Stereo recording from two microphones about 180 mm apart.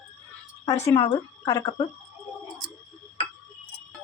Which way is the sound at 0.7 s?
15° left (ahead or behind).